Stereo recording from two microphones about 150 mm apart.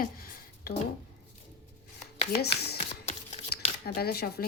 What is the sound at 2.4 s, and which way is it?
Speech, 90° left.